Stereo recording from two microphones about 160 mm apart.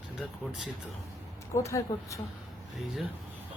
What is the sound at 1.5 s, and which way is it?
Speech, 20° left (ahead or behind).